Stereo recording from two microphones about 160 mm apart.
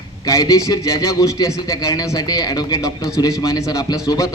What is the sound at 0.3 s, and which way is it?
A man's voice, 20° left (ahead or behind).